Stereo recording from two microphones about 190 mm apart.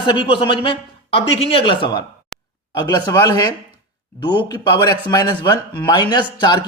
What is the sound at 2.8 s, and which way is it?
A man's voice, 20° left (ahead or behind).